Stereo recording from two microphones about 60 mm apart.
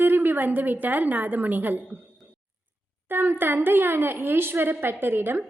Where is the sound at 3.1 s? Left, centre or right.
Right.